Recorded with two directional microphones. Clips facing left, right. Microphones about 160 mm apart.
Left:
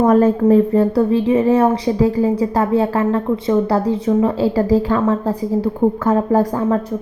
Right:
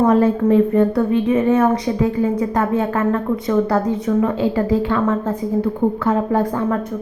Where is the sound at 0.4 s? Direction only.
35° left (ahead or behind).